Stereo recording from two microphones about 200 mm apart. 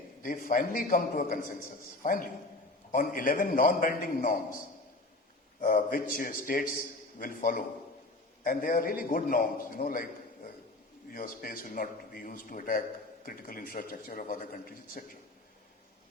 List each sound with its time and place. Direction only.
0.2 s a man's voice: 45° left (ahead or behind)
2.9 s a man's voice: 45° left (ahead or behind)
5.5 s a man's voice: 40° left (ahead or behind)